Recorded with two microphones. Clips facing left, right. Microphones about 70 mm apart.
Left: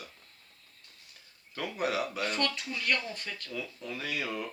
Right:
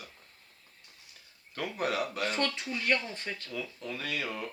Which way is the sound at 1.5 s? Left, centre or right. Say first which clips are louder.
Even; centre.